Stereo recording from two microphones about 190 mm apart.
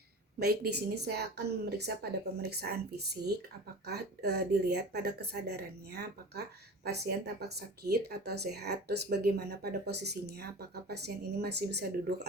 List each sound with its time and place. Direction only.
0.3 s speech: 55° right (ahead or behind)
3.8 s speech: 60° right (ahead or behind)